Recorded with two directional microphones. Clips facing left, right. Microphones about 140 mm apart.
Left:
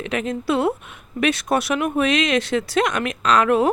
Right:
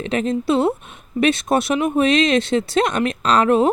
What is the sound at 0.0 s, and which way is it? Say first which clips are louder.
Speech: right 4 dB; 30° right (ahead or behind).